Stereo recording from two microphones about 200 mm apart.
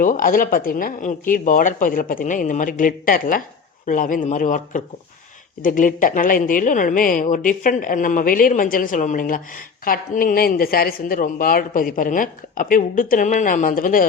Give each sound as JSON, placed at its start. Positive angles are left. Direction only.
{"t": 0.0, "sound": "a woman's voice", "side_deg": 45}